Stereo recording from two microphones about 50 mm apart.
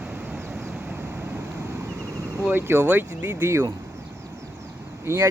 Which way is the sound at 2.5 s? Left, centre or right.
Right.